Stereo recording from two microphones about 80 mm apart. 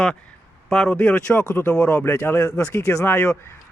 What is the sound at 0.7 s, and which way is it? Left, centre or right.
Speech, centre.